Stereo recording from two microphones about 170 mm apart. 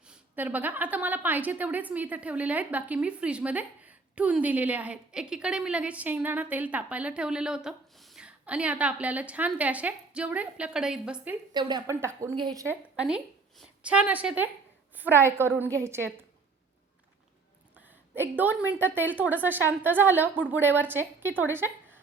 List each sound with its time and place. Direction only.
0.1 s a woman's voice: 10° right (ahead or behind)
11.5 s a woman's voice: 25° right (ahead or behind)
11.9 s a woman's voice: 15° right (ahead or behind)
12.4 s a woman's voice: 25° right (ahead or behind)
12.6 s a woman's voice: 5° right (ahead or behind)
17.7 s a woman's voice: 10° right (ahead or behind)